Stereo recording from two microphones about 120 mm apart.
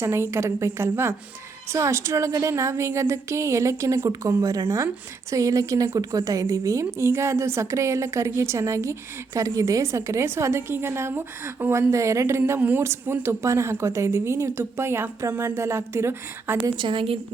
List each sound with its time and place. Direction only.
0.0 s a woman's voice: 20° right (ahead or behind)
16.6 s a woman's voice: 40° right (ahead or behind)